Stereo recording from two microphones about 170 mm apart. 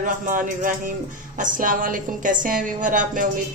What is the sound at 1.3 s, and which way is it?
A woman's voice, 50° right (ahead or behind).